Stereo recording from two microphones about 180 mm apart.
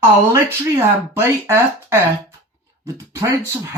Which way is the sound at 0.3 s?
15° right (ahead or behind).